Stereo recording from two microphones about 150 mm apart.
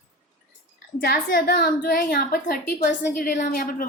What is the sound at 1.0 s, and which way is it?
A woman's voice, 80° left.